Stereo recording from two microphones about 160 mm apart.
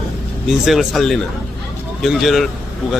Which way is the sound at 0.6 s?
Centre (ahead or behind).